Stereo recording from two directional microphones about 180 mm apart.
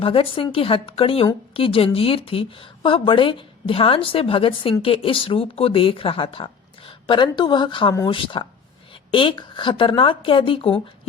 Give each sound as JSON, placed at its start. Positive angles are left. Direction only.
{"t": 0.0, "sound": "a woman's voice", "side_deg": 30}